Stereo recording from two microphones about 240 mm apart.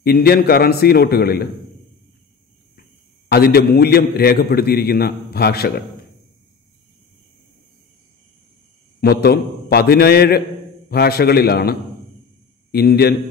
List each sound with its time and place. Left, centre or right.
0.0 s a man's voice: left
3.3 s a man's voice: left
9.0 s a man's voice: left
12.7 s a man's voice: left